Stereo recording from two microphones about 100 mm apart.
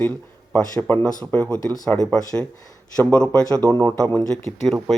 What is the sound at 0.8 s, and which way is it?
Speech, 20° left (ahead or behind).